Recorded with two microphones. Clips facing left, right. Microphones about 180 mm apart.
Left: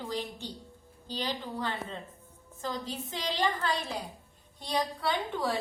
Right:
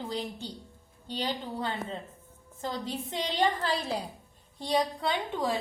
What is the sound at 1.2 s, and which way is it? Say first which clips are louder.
A woman's voice: right 2 dB; 25° right (ahead or behind).